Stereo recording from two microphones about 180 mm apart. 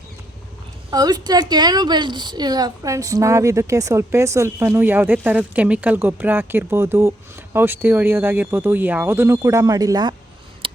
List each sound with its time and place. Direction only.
0.9 s a woman's voice: 20° right (ahead or behind)